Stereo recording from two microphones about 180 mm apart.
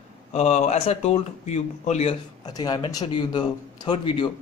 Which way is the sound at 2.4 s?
20° left (ahead or behind).